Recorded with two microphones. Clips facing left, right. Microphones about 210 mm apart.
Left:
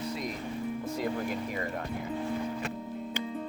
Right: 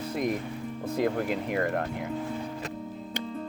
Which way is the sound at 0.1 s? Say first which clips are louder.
Right 7 dB; 55° right (ahead or behind).